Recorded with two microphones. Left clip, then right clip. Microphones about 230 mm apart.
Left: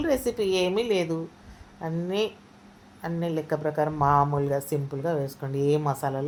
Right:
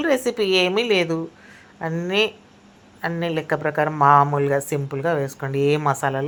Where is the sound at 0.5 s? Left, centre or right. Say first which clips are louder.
Right 7 dB; centre.